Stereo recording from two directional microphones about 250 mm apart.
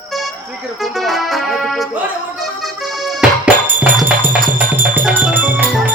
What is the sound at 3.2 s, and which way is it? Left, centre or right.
Music, centre.